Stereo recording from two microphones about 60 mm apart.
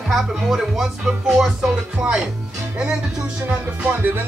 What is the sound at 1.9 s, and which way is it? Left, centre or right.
Music, right.